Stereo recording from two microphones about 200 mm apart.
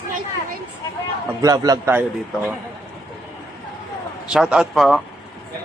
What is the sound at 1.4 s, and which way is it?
Speech, 15° right (ahead or behind).